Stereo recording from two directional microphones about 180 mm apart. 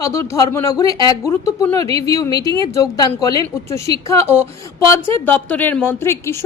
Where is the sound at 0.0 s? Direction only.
15° left (ahead or behind).